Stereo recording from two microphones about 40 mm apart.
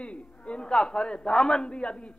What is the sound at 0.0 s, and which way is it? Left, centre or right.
A man's voice, left.